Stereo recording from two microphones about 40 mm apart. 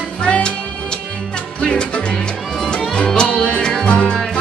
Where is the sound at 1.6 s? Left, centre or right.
Left.